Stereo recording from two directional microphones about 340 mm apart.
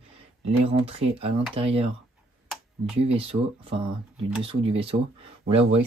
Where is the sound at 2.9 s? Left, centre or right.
Centre.